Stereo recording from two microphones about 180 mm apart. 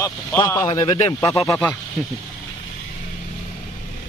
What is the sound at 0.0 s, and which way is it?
Speech, 15° left (ahead or behind).